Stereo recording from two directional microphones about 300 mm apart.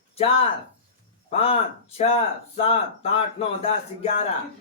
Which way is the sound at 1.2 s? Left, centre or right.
Centre.